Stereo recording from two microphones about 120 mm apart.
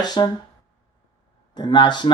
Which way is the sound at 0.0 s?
35° left (ahead or behind).